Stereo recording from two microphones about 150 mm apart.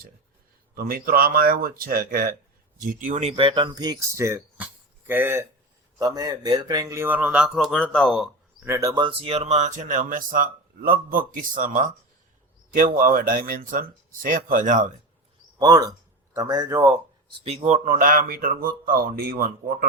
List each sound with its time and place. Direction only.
0.8 s speech: 75° right (ahead or behind)
2.8 s speech: 65° right (ahead or behind); by 8.3 s 5° left (ahead or behind)
8.6 s speech: 20° right (ahead or behind); by 11.9 s 65° right (ahead or behind)
13.0 s speech: 70° right (ahead or behind)
15.5 s speech: 25° right (ahead or behind)
17.4 s speech: 45° right (ahead or behind)
17.8 s speech: 70° right (ahead or behind)